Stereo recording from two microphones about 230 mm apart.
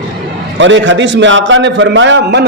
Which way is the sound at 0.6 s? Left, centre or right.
Right.